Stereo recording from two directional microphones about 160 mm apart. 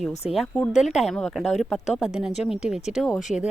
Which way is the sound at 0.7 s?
45° left (ahead or behind).